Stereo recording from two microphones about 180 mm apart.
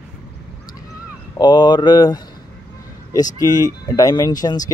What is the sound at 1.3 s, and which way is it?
Speech, 25° left (ahead or behind).